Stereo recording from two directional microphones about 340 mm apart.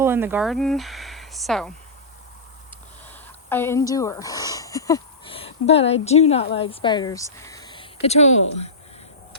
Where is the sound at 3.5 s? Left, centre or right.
Centre.